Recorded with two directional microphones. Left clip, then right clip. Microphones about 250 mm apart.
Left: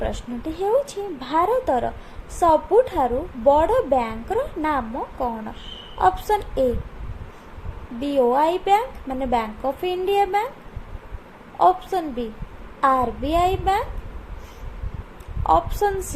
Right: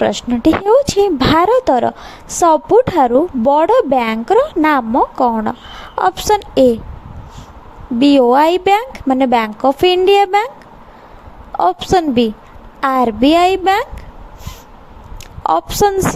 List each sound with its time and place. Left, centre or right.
0.0 s a woman's voice: right
7.9 s a woman's voice: right
11.6 s a woman's voice: right
15.4 s a woman's voice: right